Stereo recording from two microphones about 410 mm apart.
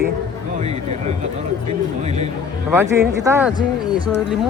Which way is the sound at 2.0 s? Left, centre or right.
Centre.